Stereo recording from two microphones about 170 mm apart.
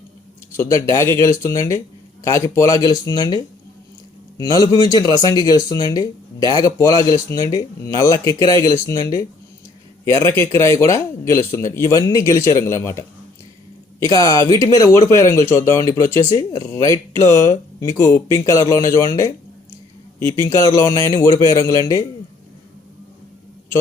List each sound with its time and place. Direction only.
0.5 s speech: 15° left (ahead or behind)